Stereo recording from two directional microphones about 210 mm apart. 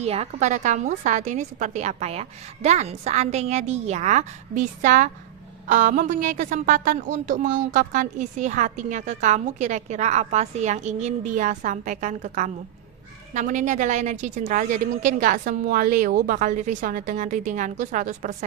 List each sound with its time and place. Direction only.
0.0 s a woman's voice: 30° right (ahead or behind)